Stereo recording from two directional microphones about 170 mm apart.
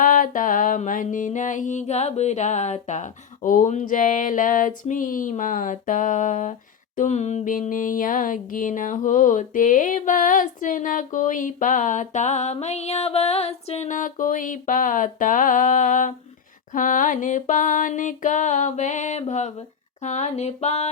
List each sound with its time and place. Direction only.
0.0 s music: 50° left (ahead or behind)